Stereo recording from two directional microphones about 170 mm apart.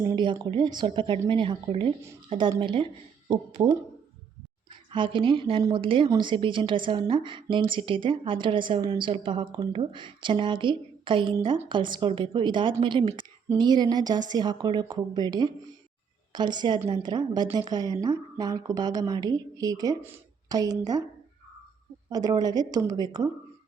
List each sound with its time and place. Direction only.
0.0 s a sound: 20° right (ahead or behind)
0.4 s a woman's voice: 25° right (ahead or behind)
4.7 s a woman's voice: 30° right (ahead or behind)
22.1 s a woman's voice: 20° right (ahead or behind)